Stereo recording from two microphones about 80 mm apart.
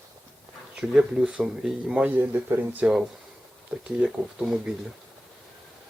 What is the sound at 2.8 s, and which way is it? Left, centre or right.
Speech, centre.